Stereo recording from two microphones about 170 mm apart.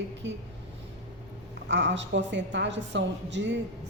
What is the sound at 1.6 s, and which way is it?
A woman's voice, 90° right.